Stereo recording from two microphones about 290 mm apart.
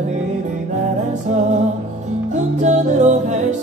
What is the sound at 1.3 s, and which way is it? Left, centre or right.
Music, right.